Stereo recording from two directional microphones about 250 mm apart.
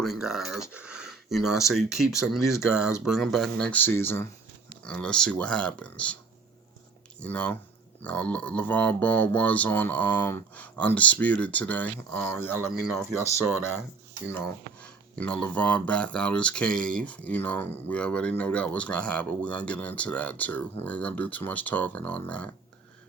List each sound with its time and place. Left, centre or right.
0.0 s speech: centre
7.2 s speech: centre